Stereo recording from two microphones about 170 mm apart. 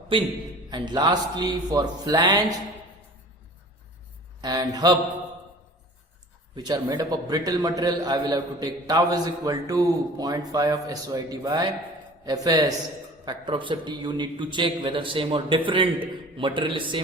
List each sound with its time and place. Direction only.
0.1 s a man's voice: 30° right (ahead or behind)
4.4 s speech: 25° right (ahead or behind)
6.6 s a man's voice: 25° right (ahead or behind)